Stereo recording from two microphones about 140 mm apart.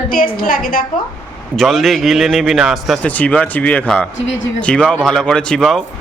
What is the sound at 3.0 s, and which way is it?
Speech, 10° left (ahead or behind).